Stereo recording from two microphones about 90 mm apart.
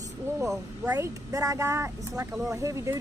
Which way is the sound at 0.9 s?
40° right (ahead or behind).